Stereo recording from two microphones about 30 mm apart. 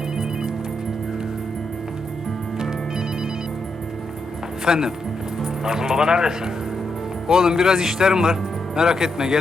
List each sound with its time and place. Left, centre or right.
4.6 s speech: centre